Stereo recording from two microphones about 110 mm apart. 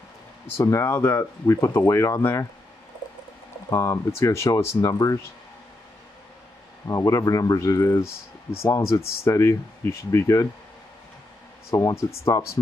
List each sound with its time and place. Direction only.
0.6 s speech: 25° left (ahead or behind)
3.7 s speech: 30° left (ahead or behind)
6.9 s speech: 30° left (ahead or behind)
11.7 s speech: 30° left (ahead or behind)